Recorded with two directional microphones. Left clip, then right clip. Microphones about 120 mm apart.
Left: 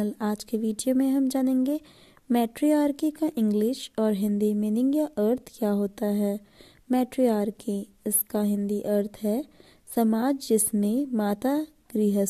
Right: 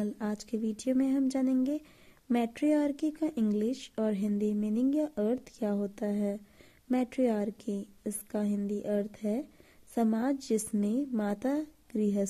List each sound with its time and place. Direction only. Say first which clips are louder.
0.0 s a woman's voice: left 6 dB; 40° left (ahead or behind)